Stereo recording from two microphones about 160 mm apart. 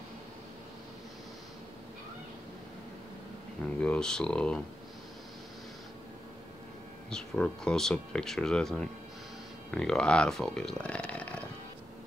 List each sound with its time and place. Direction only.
3.8 s speech: 5° left (ahead or behind)
7.1 s speech: 5° left (ahead or behind)